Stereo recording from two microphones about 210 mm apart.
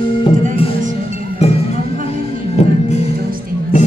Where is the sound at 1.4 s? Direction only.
30° left (ahead or behind).